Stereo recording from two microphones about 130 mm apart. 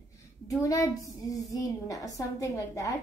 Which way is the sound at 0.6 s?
25° left (ahead or behind).